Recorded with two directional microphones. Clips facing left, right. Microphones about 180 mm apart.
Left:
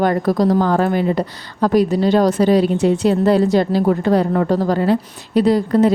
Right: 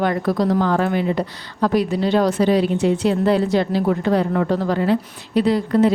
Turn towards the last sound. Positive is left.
turn(degrees=40)  # may be behind; listen again after turning